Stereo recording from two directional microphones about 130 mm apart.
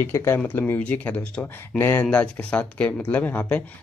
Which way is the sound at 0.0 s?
20° left (ahead or behind).